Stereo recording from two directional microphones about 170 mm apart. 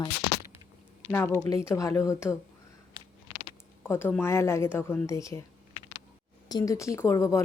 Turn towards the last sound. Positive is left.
turn(degrees=15)  # may be behind; listen again after turning